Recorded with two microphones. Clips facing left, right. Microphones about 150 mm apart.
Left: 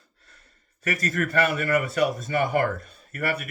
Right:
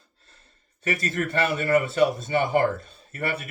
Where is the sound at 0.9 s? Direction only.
25° right (ahead or behind).